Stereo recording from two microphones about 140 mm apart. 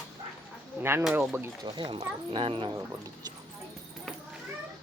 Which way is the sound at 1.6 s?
35° right (ahead or behind).